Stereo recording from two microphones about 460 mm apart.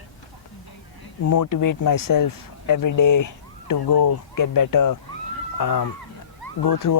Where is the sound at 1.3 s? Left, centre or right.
Left.